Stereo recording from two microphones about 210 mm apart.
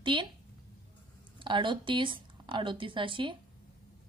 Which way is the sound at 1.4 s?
20° right (ahead or behind).